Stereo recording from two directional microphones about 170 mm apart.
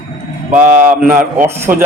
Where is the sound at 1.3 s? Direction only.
15° right (ahead or behind).